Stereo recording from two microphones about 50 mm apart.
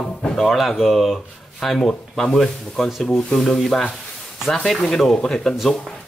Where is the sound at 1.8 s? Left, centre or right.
Centre.